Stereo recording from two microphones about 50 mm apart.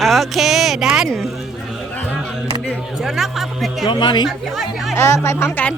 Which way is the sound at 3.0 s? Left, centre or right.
Centre.